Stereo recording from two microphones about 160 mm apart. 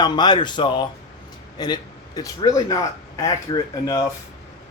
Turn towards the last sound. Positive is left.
turn(degrees=25)  # may be behind; listen again after turning